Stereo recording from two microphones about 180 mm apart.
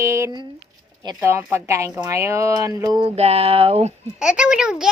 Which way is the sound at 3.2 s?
35° right (ahead or behind).